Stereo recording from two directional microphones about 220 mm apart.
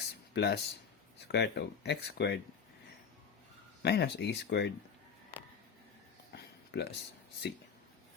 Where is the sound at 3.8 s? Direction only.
50° left (ahead or behind).